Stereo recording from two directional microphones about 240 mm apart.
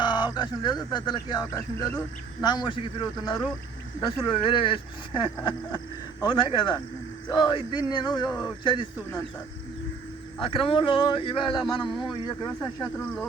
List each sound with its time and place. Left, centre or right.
0.0 s speech: centre
10.4 s speech: left